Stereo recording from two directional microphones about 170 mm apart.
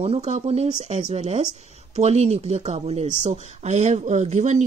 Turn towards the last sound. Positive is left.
turn(degrees=-45)  # may be behind; listen again after turning